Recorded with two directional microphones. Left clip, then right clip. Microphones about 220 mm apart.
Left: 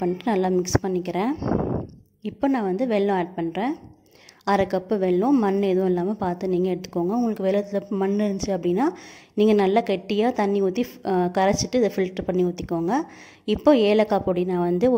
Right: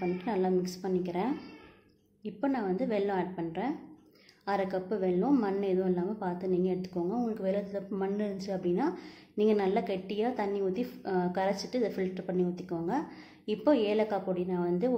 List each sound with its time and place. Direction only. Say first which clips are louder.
0.0 s a woman's voice: left 8 dB; 40° left (ahead or behind)